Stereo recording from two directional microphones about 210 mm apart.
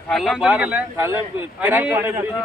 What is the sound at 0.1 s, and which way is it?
Speech, centre (ahead or behind).